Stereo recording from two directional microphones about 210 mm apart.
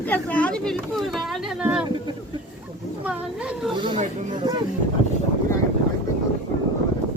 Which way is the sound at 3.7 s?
25° right (ahead or behind).